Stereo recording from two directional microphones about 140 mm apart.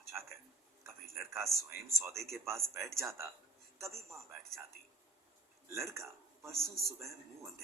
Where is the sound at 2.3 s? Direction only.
20° right (ahead or behind).